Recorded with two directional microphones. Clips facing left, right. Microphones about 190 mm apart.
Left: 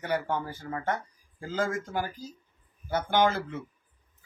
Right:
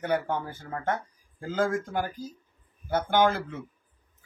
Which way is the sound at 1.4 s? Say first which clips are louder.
Right 3 dB; 55° right (ahead or behind).